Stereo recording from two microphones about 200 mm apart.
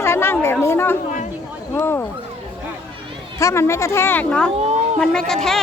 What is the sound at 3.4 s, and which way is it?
A woman's voice, 15° left (ahead or behind).